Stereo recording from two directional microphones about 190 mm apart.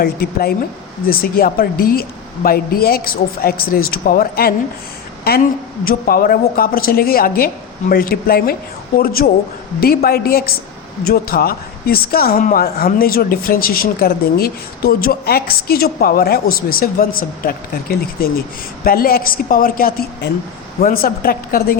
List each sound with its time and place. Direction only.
0.0 s a woman's voice: 50° left (ahead or behind)